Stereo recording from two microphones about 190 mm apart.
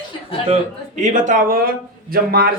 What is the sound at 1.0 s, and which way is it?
Speech, 40° right (ahead or behind).